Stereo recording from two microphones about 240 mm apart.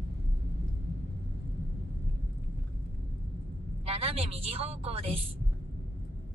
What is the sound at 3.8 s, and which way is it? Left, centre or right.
A woman's voice, right.